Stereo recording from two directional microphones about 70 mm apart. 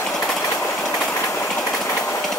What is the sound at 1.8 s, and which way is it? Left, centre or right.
Train, left.